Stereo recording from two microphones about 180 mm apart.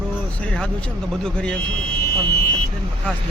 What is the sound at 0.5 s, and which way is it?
Speech, 5° left (ahead or behind).